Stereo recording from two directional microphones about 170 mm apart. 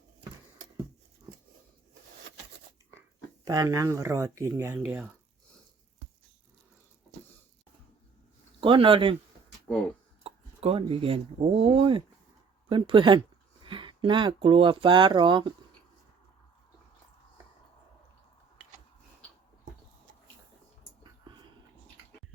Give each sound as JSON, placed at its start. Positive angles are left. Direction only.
{"t": 3.4, "sound": "speech", "side_deg": -20}
{"t": 8.6, "sound": "speech", "side_deg": -30}
{"t": 10.2, "sound": "speech", "side_deg": -35}